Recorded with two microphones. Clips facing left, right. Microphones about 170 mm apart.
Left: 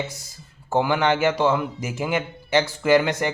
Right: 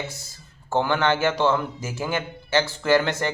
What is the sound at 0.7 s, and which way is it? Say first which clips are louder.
A man's voice: left 1 dB; 15° left (ahead or behind).